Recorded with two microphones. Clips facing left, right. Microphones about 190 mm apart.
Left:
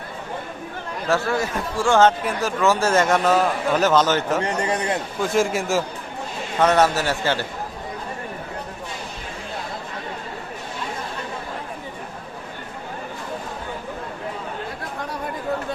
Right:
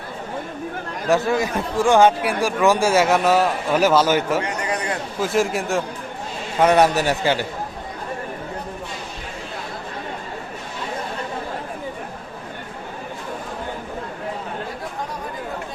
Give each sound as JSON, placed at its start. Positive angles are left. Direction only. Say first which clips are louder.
{"t": 1.0, "sound": "speech", "louder": "right 3 dB", "side_deg": -15}
{"t": 4.4, "sound": "a man's voice", "louder": "left 2 dB", "side_deg": 25}
{"t": 5.2, "sound": "a man's voice", "louder": "right 1 dB", "side_deg": 0}
{"t": 6.6, "sound": "speech", "louder": "right 2 dB", "side_deg": -15}